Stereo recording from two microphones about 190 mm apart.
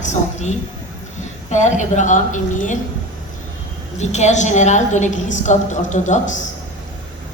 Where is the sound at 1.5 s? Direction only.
40° left (ahead or behind).